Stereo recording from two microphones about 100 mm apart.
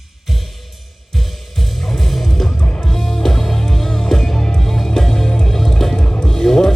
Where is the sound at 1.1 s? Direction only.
Centre (ahead or behind).